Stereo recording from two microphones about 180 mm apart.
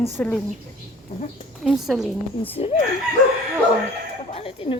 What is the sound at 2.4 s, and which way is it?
Speech, 30° left (ahead or behind).